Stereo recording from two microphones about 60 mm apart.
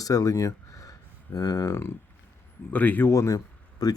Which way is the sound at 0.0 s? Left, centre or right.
Left.